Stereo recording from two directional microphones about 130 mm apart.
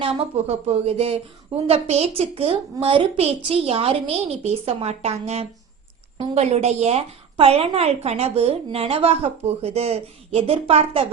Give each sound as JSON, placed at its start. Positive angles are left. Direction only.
{"t": 0.0, "sound": "a woman's voice", "side_deg": -50}